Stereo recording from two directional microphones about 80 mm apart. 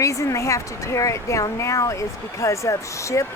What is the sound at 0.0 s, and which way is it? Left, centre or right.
Speech, left.